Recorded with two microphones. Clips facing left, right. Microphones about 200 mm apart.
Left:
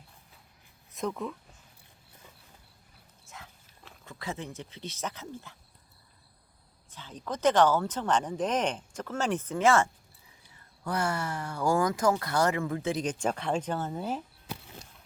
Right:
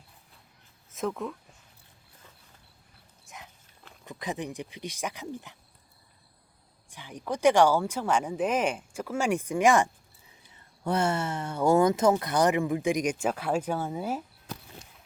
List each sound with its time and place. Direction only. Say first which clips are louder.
0.9 s speech: right 2 dB; centre (ahead or behind)
3.2 s dog: right 1 dB; 15° right (ahead or behind)
4.0 s speech: right 4 dB; 15° right (ahead or behind)
6.9 s speech: right 3 dB; 15° right (ahead or behind)